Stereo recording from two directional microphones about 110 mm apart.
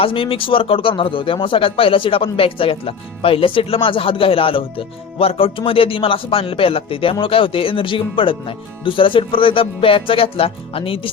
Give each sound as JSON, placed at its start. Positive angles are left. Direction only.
{"t": 0.0, "sound": "speech", "side_deg": 55}